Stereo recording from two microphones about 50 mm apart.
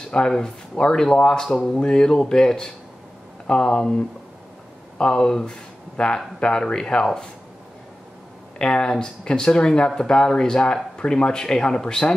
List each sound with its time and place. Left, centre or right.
0.4 s speech: centre
8.5 s speech: centre